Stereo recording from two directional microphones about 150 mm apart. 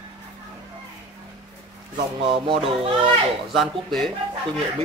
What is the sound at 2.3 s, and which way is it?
Speech, 35° right (ahead or behind).